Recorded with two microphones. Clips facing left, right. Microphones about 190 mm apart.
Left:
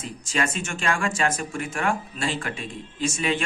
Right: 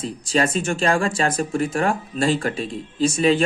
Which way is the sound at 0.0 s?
35° right (ahead or behind).